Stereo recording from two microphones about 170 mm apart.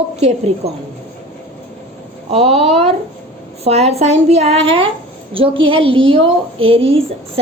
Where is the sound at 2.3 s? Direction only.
35° right (ahead or behind).